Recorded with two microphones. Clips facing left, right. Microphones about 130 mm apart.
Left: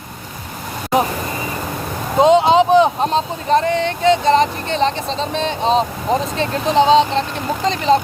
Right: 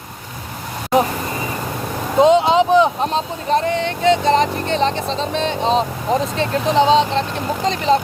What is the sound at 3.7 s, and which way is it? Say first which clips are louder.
Vehicle: left 1 dB; 30° left (ahead or behind).